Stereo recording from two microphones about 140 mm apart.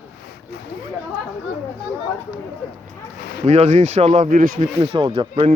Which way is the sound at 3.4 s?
50° right (ahead or behind).